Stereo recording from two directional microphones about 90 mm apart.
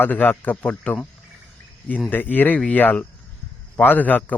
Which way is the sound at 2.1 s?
20° left (ahead or behind).